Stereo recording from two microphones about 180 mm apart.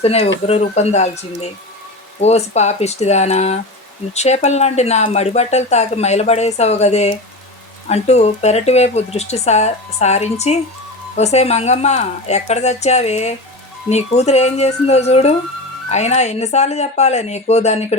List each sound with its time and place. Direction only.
0.0 s speech: 35° left (ahead or behind)